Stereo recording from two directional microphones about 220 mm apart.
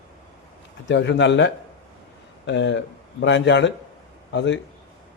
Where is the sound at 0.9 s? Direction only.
55° left (ahead or behind).